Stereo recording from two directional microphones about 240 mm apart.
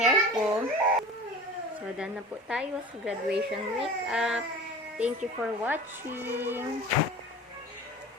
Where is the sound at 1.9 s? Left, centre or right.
Centre.